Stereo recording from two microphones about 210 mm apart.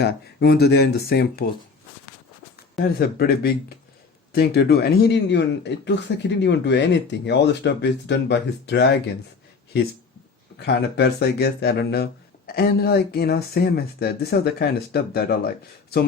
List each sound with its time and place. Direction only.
0.0 s speech: 50° left (ahead or behind)
2.8 s speech: 45° left (ahead or behind)
10.6 s speech: 55° left (ahead or behind)